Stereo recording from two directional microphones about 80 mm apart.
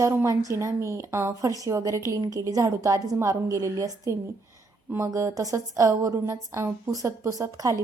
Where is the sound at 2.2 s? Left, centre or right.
Right.